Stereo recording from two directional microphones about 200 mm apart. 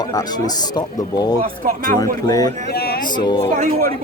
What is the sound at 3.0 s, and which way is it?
Speech, 20° left (ahead or behind).